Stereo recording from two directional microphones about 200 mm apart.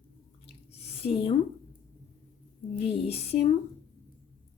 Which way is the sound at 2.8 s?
30° left (ahead or behind).